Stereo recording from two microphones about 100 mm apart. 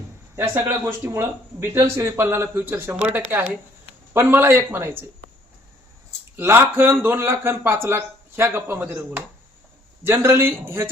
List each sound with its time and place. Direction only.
0.3 s speech: 25° right (ahead or behind)
6.3 s speech: 25° right (ahead or behind)